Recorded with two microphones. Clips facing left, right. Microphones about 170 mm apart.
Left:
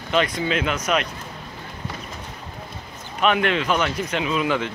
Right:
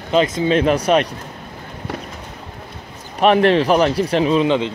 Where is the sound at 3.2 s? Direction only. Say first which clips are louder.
Right 7 dB; 35° right (ahead or behind).